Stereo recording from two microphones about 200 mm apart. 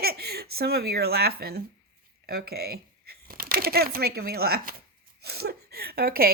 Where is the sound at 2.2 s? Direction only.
50° right (ahead or behind).